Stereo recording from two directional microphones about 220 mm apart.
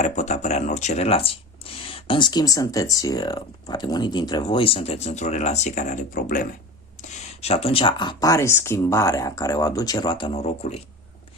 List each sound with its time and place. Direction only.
0.0 s speech: 30° left (ahead or behind)